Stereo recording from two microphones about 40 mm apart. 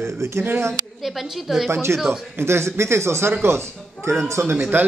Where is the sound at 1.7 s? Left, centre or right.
Right.